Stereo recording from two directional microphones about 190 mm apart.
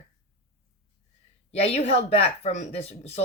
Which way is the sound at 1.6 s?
35° left (ahead or behind).